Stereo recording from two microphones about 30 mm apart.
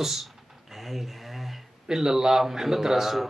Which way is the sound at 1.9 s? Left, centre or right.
Centre.